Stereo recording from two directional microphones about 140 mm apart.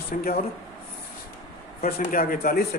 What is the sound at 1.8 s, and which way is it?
Speech, 90° left.